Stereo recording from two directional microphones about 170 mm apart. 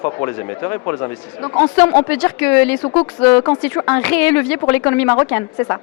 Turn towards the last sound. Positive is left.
turn(degrees=15)  # may be behind; listen again after turning